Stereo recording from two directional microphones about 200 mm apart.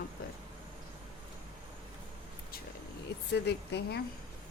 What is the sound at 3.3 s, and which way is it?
Speech, 55° left (ahead or behind).